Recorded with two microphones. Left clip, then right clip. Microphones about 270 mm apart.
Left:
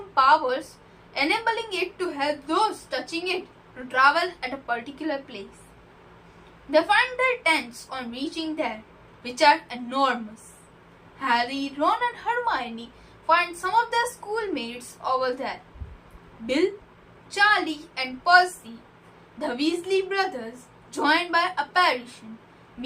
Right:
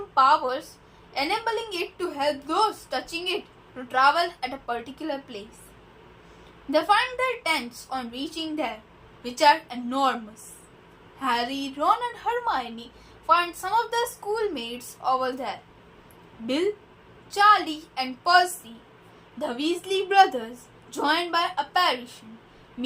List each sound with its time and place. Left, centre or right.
0.1 s a woman's voice: right
6.7 s a woman's voice: right
11.2 s a woman's voice: right
17.3 s a woman's voice: right